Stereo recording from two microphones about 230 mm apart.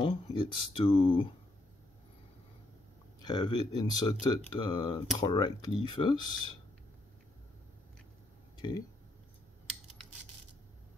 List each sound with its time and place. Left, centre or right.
0.0 s speech: left
3.3 s speech: centre
8.5 s speech: centre